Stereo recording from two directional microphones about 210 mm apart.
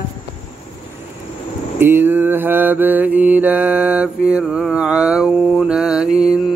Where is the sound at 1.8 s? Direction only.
10° right (ahead or behind).